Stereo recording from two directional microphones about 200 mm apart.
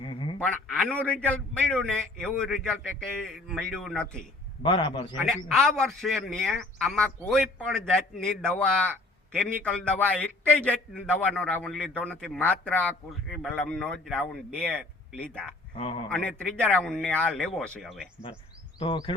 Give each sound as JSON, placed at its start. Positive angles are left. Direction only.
{"t": 0.0, "sound": "a sound", "side_deg": 25}
{"t": 0.4, "sound": "a man's voice", "side_deg": 5}
{"t": 4.6, "sound": "a man's voice", "side_deg": 25}
{"t": 5.5, "sound": "a man's voice", "side_deg": 0}
{"t": 15.8, "sound": "a man's voice", "side_deg": 30}
{"t": 16.0, "sound": "a man's voice", "side_deg": 5}
{"t": 18.8, "sound": "a man's voice", "side_deg": 25}